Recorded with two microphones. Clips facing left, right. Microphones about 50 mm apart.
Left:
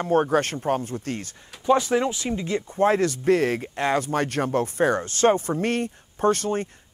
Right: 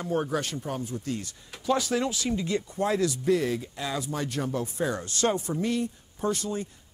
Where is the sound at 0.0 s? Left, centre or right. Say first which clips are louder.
Left 8 dB; left.